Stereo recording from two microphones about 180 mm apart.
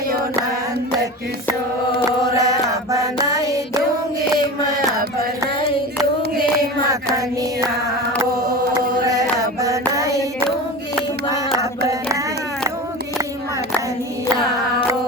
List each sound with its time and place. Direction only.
2.0 s a sound: 20° right (ahead or behind)
8.7 s chant: 20° right (ahead or behind)
9.6 s hands: 20° right (ahead or behind)